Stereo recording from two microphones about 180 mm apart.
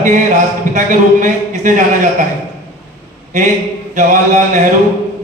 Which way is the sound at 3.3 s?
45° right (ahead or behind).